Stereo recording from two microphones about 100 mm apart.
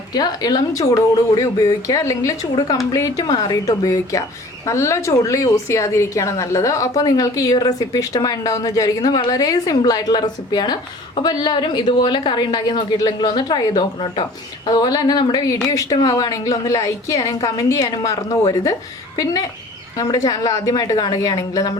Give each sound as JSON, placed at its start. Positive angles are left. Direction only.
{"t": 0.1, "sound": "a woman's voice", "side_deg": 40}